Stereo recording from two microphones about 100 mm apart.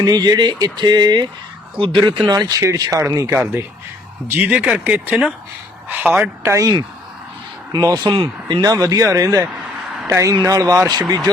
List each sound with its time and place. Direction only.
0.0 s speech: 40° right (ahead or behind)
3.3 s speech: 20° right (ahead or behind)
6.5 s speech: 35° right (ahead or behind)
8.1 s speech: 60° right (ahead or behind)
8.6 s a man's voice: 35° right (ahead or behind)